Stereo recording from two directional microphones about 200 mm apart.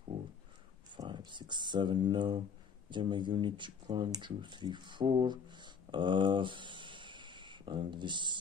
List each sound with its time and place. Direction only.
0.9 s speech: 20° right (ahead or behind)